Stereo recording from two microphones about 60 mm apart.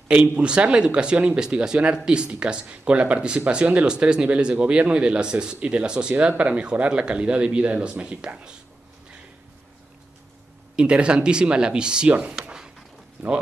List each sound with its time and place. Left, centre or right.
0.1 s speech: centre
10.8 s speech: centre
12.4 s a sound: centre